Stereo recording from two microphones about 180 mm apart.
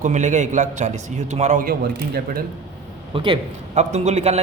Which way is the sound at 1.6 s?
60° right (ahead or behind).